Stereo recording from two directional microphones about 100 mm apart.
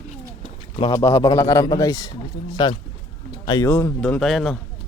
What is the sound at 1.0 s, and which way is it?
A man's voice, 30° left (ahead or behind).